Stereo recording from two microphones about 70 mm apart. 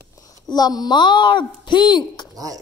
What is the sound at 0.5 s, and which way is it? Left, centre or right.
Speech, left.